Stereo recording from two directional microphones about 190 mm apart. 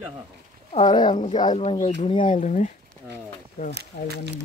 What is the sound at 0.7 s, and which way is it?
Speech, 25° left (ahead or behind).